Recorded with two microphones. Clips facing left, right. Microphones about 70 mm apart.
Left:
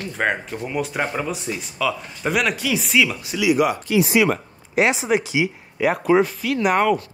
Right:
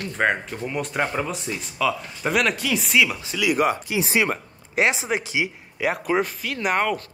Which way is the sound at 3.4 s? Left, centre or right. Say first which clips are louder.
Left 3 dB; right.